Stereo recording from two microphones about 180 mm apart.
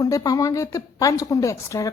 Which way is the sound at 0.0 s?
20° left (ahead or behind).